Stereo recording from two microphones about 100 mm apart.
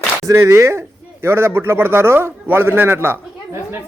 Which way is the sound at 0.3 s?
25° right (ahead or behind).